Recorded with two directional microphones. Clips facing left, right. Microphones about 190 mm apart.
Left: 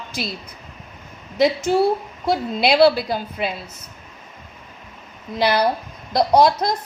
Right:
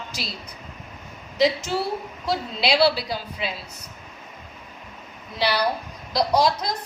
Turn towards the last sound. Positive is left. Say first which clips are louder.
# left 5 dB
turn(degrees=55)  # may be behind; listen again after turning